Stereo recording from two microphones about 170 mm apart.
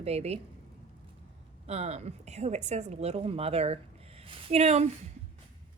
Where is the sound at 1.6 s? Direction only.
40° right (ahead or behind).